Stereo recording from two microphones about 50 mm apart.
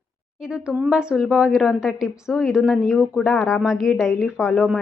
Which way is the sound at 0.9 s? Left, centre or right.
Centre.